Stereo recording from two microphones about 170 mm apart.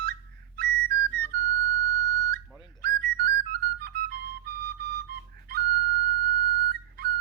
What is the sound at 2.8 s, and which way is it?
Whistle, 70° right (ahead or behind).